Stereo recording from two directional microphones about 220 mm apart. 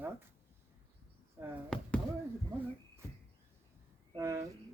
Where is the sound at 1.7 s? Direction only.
5° left (ahead or behind).